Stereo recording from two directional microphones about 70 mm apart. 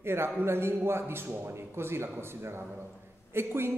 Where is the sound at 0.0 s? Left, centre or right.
Right.